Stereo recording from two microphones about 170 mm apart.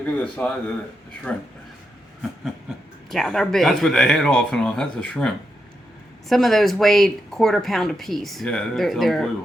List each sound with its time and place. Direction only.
0.0 s a man's voice: 5° left (ahead or behind)
3.1 s speech: 5° left (ahead or behind)